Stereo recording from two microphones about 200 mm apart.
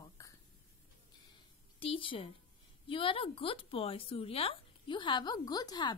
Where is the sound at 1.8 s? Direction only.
25° left (ahead or behind).